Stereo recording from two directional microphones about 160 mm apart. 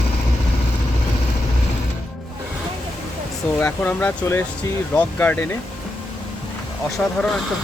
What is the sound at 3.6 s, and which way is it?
Speech, 10° left (ahead or behind).